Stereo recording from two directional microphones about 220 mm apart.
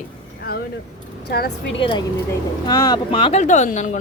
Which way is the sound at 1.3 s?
45° left (ahead or behind).